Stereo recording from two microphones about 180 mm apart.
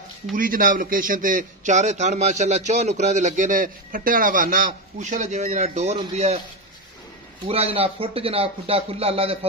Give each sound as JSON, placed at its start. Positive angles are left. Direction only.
{"t": 0.3, "sound": "a man's voice", "side_deg": -50}
{"t": 7.4, "sound": "a man's voice", "side_deg": -35}